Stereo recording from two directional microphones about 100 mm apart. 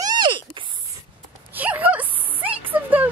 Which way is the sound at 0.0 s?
50° right (ahead or behind).